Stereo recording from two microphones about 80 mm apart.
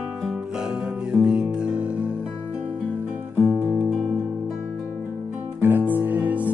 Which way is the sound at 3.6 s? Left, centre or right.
Right.